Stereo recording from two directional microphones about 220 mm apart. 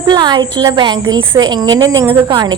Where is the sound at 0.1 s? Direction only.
20° right (ahead or behind).